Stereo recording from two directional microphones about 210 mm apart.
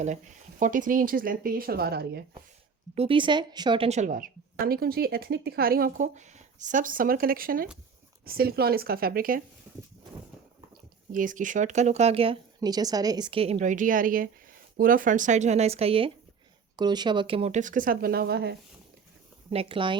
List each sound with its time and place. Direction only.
0.6 s speech: 40° right (ahead or behind)
2.9 s a woman's voice: 25° right (ahead or behind); by 9.4 s 45° right (ahead or behind)
11.1 s a woman's voice: 40° right (ahead or behind)
19.5 s speech: 25° right (ahead or behind)